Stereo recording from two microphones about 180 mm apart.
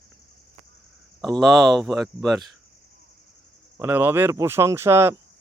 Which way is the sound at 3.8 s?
10° right (ahead or behind).